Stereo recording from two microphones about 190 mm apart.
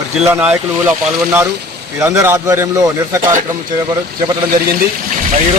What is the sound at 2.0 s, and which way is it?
A man's voice, 15° right (ahead or behind).